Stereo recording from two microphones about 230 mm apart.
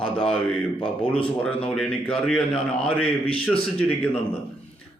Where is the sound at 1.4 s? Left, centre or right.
Centre.